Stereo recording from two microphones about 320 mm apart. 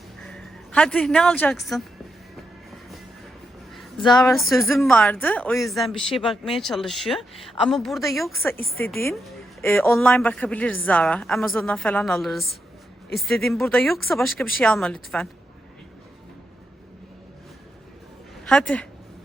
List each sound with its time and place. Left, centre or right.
0.2 s a woman's voice: centre
4.2 s a woman's voice: centre
8.5 s a woman's voice: left
8.8 s a woman's voice: centre
18.4 s a woman's voice: centre